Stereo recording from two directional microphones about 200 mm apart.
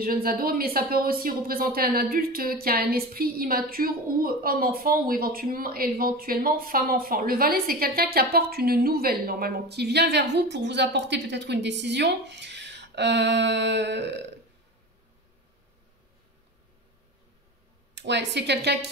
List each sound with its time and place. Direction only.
0.0 s speech: 45° right (ahead or behind)
17.9 s speech: 60° right (ahead or behind)